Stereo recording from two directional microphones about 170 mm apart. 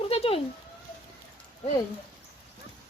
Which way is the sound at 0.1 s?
35° left (ahead or behind).